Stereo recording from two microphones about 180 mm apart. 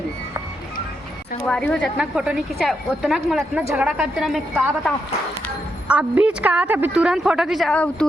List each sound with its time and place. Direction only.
1.5 s a woman's voice: 5° left (ahead or behind)
3.6 s a woman's voice: 15° right (ahead or behind)
3.8 s a woman's voice: 5° right (ahead or behind)